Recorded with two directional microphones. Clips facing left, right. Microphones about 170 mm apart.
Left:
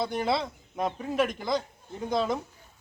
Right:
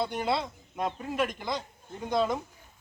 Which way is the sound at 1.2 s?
Centre (ahead or behind).